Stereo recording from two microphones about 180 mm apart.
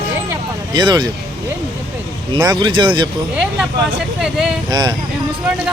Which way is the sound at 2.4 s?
25° right (ahead or behind).